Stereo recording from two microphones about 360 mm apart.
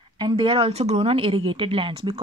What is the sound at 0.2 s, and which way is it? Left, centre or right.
Speech, centre.